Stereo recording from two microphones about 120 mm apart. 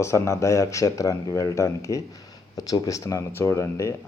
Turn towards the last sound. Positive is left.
turn(degrees=25)  # may be behind; listen again after turning